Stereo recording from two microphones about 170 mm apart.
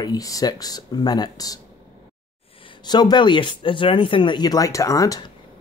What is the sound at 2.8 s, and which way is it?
Speech, 25° left (ahead or behind).